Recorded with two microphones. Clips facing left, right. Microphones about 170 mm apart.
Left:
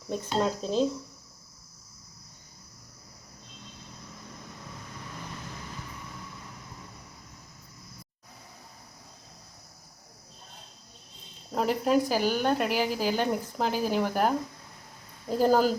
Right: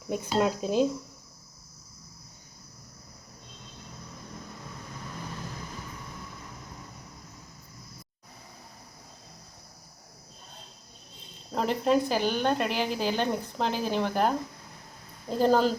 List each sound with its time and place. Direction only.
0.1 s speech: 10° right (ahead or behind)
11.5 s a woman's voice: 5° left (ahead or behind)